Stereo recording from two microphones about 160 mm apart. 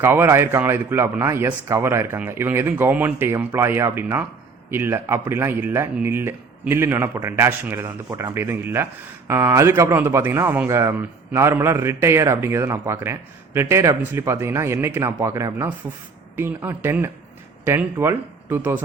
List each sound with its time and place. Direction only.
0.0 s speech: 15° right (ahead or behind)